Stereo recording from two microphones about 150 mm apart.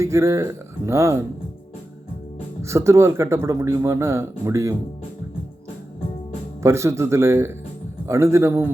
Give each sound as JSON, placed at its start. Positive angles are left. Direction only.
{"t": 0.0, "sound": "speech", "side_deg": -20}
{"t": 2.6, "sound": "speech", "side_deg": -20}
{"t": 6.6, "sound": "speech", "side_deg": -20}